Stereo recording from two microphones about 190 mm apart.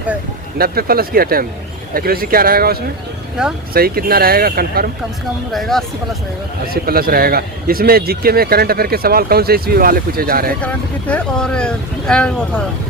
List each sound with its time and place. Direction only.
0.6 s a man's voice: 50° right (ahead or behind)
3.4 s speech: 5° right (ahead or behind)
3.8 s a man's voice: 50° right (ahead or behind)
5.5 s speech: centre (ahead or behind)
6.8 s a man's voice: 50° right (ahead or behind)
10.6 s speech: 5° left (ahead or behind)